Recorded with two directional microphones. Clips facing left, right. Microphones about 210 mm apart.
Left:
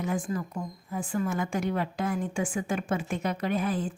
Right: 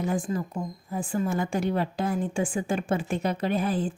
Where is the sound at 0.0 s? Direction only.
30° right (ahead or behind).